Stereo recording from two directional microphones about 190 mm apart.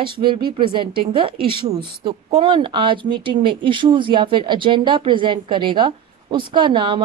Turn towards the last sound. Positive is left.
turn(degrees=-25)  # may be behind; listen again after turning